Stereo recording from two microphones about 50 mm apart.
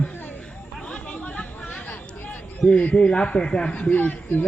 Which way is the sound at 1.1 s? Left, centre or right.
Left.